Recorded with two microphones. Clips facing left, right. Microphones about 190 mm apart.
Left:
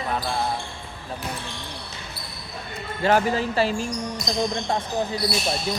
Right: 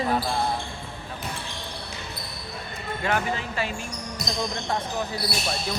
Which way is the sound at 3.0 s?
35° left (ahead or behind).